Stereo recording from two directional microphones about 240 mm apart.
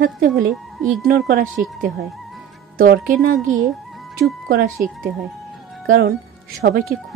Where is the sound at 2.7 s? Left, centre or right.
Right.